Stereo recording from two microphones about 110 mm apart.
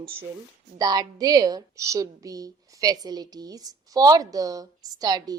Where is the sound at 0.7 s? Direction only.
35° right (ahead or behind).